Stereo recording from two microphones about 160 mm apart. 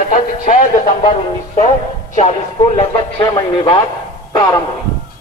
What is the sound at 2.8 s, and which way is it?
Speech, 30° left (ahead or behind).